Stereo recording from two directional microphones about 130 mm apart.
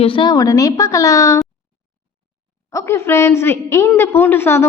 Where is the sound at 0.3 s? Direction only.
25° left (ahead or behind).